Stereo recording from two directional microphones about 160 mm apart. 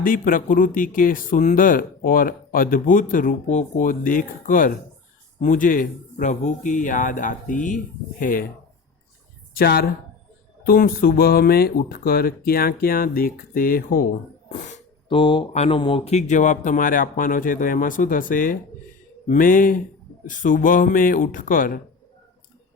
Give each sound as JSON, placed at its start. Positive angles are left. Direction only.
{"t": 0.0, "sound": "speech", "side_deg": 60}
{"t": 9.6, "sound": "speech", "side_deg": 70}
{"t": 15.1, "sound": "speech", "side_deg": 30}